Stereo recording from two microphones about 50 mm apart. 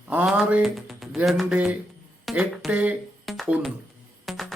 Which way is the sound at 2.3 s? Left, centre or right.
Centre.